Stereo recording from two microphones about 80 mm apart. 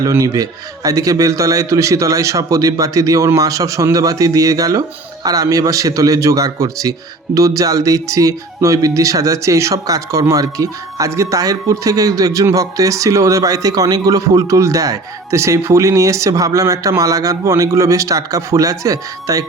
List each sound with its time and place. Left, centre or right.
0.0 s speech: right